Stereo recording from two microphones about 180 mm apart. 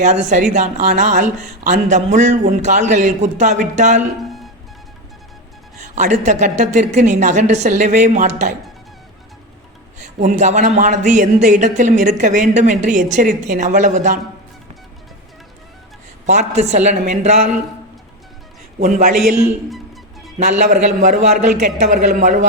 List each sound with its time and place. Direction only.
0.0 s a woman's voice: 40° right (ahead or behind)
4.2 s music: centre (ahead or behind)
5.9 s a woman's voice: 40° right (ahead or behind)
10.2 s speech: 45° right (ahead or behind)
16.2 s a woman's voice: 40° right (ahead or behind)
18.8 s speech: 50° right (ahead or behind)
20.7 s speech: 45° right (ahead or behind)